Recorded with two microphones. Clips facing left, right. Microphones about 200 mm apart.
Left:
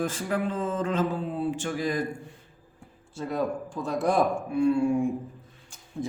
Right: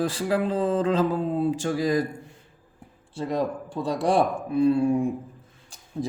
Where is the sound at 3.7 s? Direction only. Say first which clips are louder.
Right 3 dB; 35° right (ahead or behind).